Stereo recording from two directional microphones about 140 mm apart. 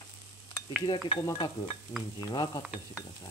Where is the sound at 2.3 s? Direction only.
30° left (ahead or behind).